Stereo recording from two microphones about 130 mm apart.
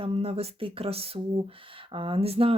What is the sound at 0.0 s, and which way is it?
Speech, 50° right (ahead or behind).